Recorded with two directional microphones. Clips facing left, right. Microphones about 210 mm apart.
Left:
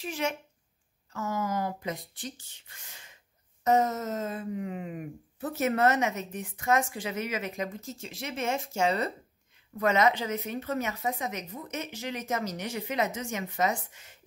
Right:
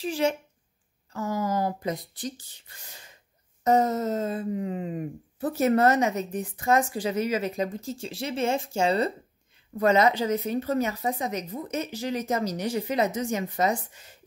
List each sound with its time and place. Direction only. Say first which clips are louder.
0.0 s speech: right 6 dB; 30° right (ahead or behind)